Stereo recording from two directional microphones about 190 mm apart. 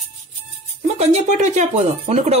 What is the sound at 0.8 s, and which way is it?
Speech, 35° right (ahead or behind).